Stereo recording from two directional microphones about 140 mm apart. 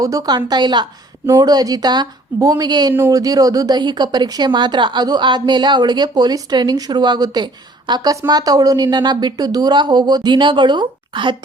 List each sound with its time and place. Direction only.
0.0 s a woman's voice: 25° right (ahead or behind)